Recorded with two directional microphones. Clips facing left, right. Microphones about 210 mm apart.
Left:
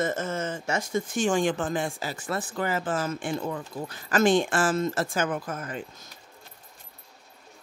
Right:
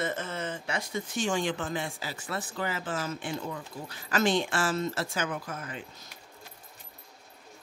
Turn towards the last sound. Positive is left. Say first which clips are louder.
# left 5 dB
turn(degrees=45)  # may be behind; listen again after turning